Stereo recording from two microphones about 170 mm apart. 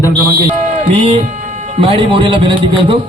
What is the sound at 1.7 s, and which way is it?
A man's voice, 35° right (ahead or behind).